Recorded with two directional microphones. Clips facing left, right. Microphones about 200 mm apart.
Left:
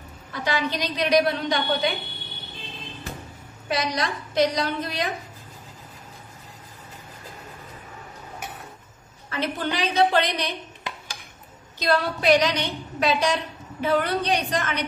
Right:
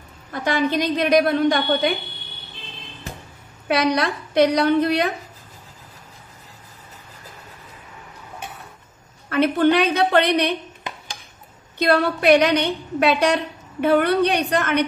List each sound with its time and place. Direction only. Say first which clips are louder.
0.3 s a woman's voice: right 5 dB; 50° right (ahead or behind)
3.6 s a woman's voice: right 7 dB; 60° right (ahead or behind)
9.3 s a woman's voice: right 11 dB; 60° right (ahead or behind)
11.8 s a woman's voice: right 5 dB; 60° right (ahead or behind)